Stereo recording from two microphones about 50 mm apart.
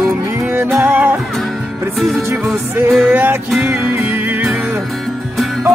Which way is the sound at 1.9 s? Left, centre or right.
Centre.